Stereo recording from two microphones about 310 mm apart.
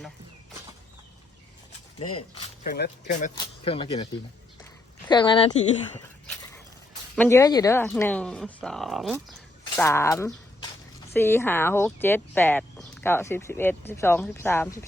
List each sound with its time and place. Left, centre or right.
2.6 s speech: left
7.2 s speech: centre